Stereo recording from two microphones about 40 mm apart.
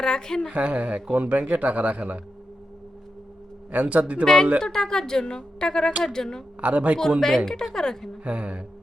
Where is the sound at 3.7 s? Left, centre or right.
Right.